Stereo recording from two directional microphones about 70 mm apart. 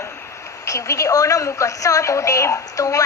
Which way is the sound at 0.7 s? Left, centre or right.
Left.